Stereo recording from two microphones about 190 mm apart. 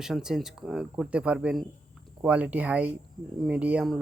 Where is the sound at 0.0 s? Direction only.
5° right (ahead or behind).